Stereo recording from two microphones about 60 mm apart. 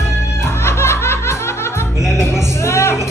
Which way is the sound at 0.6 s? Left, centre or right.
Left.